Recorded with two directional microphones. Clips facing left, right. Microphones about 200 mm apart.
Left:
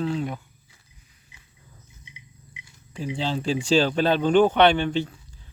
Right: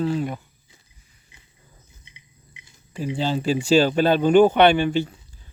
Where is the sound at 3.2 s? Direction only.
5° right (ahead or behind).